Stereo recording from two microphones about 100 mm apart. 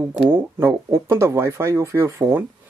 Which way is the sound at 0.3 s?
25° right (ahead or behind).